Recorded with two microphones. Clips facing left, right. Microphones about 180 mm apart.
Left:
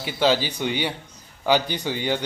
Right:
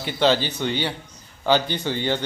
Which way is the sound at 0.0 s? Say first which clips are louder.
Right 1 dB; 10° left (ahead or behind).